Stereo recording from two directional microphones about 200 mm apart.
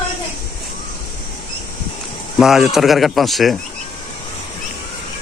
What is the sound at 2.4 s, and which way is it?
Speech, centre (ahead or behind).